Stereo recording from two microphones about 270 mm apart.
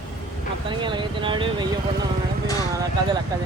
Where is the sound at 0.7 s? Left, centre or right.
Centre.